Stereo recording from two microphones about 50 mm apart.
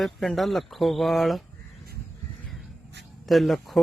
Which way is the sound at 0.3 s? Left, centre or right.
Centre.